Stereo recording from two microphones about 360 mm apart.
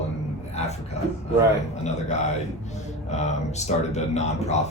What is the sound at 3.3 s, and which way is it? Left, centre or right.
Speech, centre.